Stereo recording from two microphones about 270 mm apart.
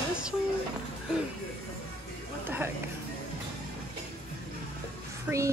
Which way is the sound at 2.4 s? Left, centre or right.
Centre.